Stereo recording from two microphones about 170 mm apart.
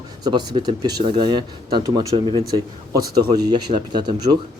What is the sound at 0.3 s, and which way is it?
Speech, 25° right (ahead or behind).